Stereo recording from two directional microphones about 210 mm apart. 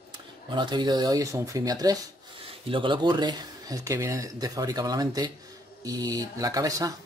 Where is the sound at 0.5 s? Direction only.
20° right (ahead or behind).